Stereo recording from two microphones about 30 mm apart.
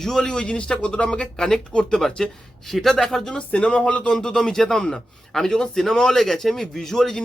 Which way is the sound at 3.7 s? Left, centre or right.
Left.